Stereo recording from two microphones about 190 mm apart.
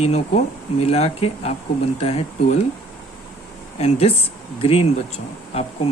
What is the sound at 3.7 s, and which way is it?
Speech, 35° left (ahead or behind).